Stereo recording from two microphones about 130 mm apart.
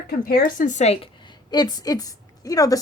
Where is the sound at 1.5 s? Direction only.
30° left (ahead or behind).